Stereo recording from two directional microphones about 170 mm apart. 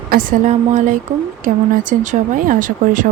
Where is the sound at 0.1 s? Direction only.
55° right (ahead or behind).